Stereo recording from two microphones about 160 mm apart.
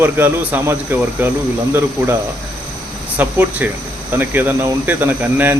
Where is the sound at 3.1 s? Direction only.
10° right (ahead or behind).